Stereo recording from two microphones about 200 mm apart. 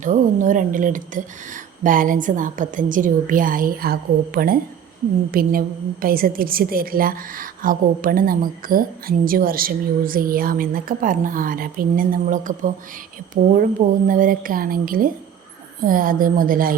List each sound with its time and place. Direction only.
0.0 s a woman's voice: 40° right (ahead or behind)